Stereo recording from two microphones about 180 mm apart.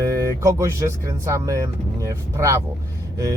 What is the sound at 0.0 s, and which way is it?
Speech, 20° right (ahead or behind).